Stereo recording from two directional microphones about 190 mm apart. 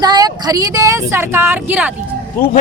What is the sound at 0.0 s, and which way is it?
Speech, 20° right (ahead or behind).